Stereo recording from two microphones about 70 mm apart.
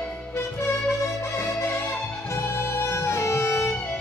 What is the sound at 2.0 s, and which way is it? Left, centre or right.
Music, centre.